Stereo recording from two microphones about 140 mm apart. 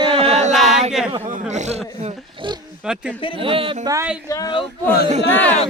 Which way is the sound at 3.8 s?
25° right (ahead or behind).